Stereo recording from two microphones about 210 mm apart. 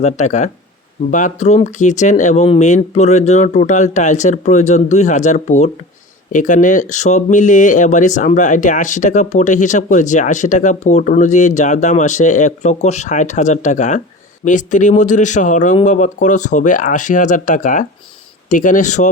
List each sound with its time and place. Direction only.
0.0 s speech: 35° left (ahead or behind)